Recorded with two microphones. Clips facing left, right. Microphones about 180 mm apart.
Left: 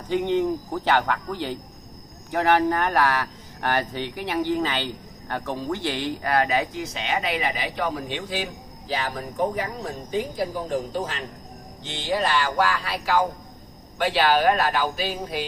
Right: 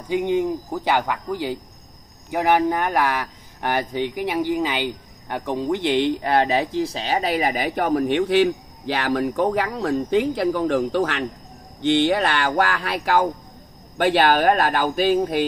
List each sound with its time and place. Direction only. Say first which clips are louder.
0.1 s speech: right 1 dB; 10° right (ahead or behind); by 15.4 s 50° right (ahead or behind)